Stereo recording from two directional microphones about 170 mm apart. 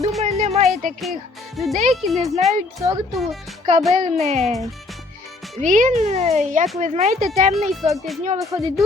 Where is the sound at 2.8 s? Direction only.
20° right (ahead or behind).